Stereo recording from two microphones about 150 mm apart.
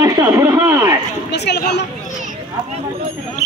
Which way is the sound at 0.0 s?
20° right (ahead or behind).